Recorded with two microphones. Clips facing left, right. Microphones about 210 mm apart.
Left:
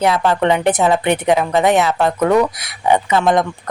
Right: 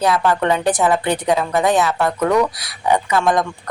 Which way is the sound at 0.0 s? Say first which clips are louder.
Left 2 dB; 20° left (ahead or behind).